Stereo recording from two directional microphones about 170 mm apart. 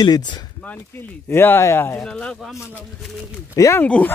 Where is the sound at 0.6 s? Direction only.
10° left (ahead or behind).